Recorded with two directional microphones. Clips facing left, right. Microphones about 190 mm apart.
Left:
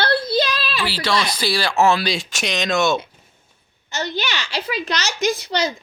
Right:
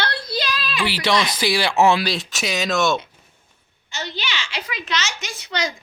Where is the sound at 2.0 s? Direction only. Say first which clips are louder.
Left 1 dB; centre (ahead or behind).